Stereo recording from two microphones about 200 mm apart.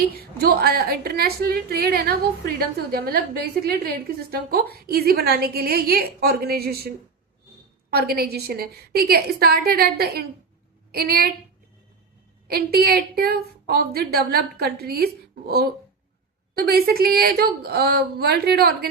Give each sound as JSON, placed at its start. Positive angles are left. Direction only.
{"t": 0.0, "sound": "a woman's voice", "side_deg": -50}
{"t": 7.9, "sound": "a woman's voice", "side_deg": -50}
{"t": 12.5, "sound": "a woman's voice", "side_deg": -50}